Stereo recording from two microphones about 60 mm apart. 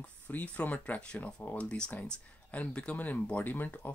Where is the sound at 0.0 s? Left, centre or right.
Left.